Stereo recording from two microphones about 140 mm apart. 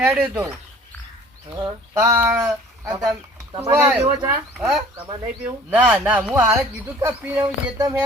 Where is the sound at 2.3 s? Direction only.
25° right (ahead or behind).